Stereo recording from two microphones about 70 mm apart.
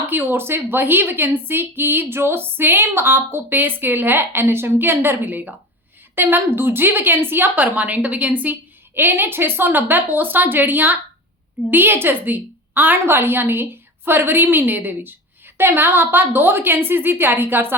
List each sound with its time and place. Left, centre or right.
0.1 s a woman's voice: right